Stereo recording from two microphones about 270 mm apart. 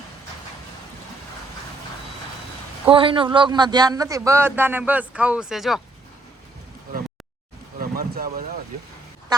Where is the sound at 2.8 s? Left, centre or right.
Centre.